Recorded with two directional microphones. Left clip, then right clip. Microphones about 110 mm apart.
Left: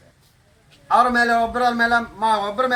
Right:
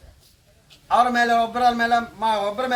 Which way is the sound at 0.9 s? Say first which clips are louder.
Left 1 dB; 15° right (ahead or behind).